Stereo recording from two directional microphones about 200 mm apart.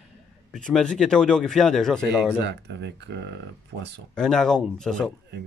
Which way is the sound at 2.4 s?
60° right (ahead or behind).